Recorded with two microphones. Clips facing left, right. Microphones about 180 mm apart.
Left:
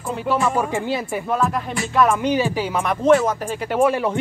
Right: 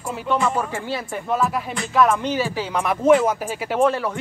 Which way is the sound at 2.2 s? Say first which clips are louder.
Left 3 dB; 15° left (ahead or behind).